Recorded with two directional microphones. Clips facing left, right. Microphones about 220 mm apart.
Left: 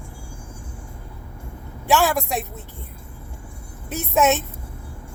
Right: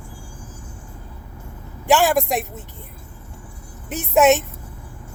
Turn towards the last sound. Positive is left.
turn(degrees=-15)  # may be behind; listen again after turning